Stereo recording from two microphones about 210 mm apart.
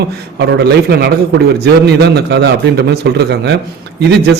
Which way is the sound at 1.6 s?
50° right (ahead or behind).